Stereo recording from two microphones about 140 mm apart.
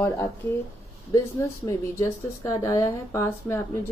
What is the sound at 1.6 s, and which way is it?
Speech, 25° left (ahead or behind).